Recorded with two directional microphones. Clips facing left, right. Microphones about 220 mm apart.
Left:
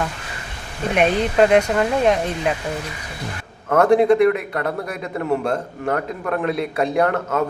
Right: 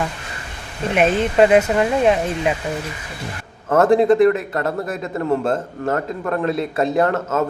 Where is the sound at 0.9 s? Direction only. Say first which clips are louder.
Right 1 dB; centre (ahead or behind).